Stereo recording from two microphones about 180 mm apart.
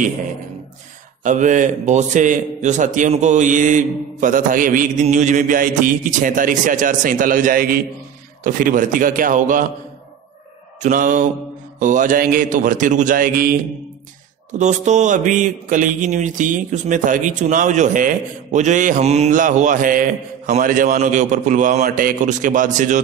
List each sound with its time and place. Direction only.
1.2 s a man's voice: 45° right (ahead or behind)
10.8 s a man's voice: 45° right (ahead or behind)
14.5 s a man's voice: 40° right (ahead or behind)